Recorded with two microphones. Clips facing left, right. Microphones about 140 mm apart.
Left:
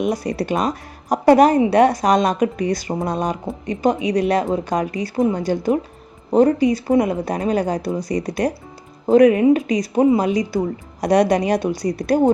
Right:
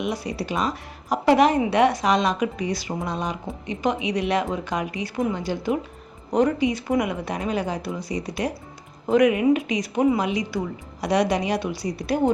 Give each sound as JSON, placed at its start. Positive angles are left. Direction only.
{"t": 0.0, "sound": "speech", "side_deg": 45}
{"t": 9.0, "sound": "speech", "side_deg": 35}